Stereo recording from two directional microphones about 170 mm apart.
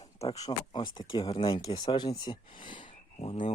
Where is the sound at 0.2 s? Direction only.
35° left (ahead or behind).